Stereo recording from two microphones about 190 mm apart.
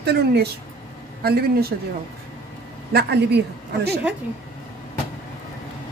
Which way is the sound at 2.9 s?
55° right (ahead or behind).